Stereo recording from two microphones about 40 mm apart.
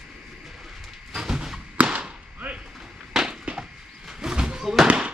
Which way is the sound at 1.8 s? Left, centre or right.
Right.